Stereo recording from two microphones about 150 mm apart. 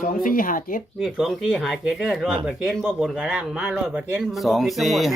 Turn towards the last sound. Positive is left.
turn(degrees=0)  # may be behind; listen again after turning